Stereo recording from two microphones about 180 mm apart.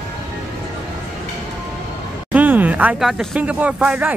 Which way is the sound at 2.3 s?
10° right (ahead or behind).